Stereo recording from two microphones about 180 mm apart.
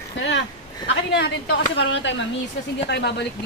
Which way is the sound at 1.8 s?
85° left.